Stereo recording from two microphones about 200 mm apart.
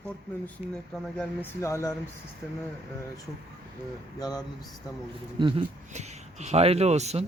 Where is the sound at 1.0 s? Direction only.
5° left (ahead or behind).